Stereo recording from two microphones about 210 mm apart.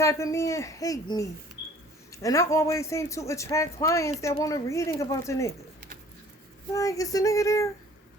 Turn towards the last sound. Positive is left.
turn(degrees=15)  # may be behind; listen again after turning